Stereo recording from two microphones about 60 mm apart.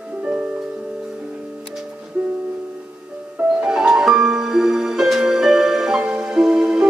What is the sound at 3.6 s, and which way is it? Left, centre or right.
Music, centre.